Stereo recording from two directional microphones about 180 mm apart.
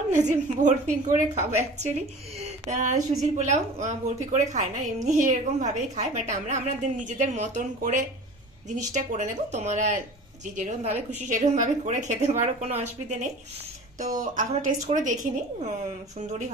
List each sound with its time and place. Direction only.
0.3 s a woman's voice: 45° right (ahead or behind)